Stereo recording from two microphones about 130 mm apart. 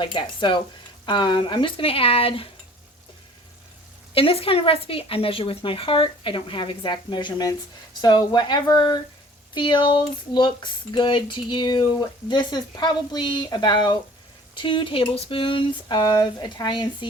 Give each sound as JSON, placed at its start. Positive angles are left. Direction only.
{"t": 0.0, "sound": "speech", "side_deg": 40}
{"t": 4.1, "sound": "speech", "side_deg": 45}